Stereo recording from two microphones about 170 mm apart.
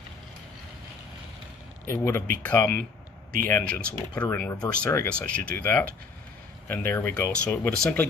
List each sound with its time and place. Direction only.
1.9 s speech: 15° left (ahead or behind)